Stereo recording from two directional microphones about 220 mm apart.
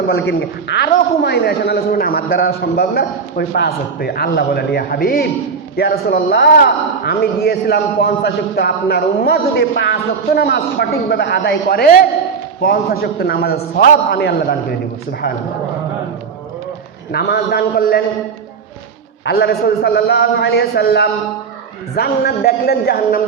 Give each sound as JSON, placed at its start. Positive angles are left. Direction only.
{"t": 0.1, "sound": "speech", "side_deg": 50}
{"t": 17.1, "sound": "speech", "side_deg": 45}
{"t": 19.2, "sound": "speech", "side_deg": 50}